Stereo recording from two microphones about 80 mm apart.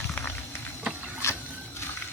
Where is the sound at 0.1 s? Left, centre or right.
Left.